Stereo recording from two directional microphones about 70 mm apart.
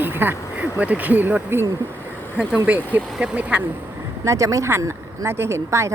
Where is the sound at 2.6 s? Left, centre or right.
Right.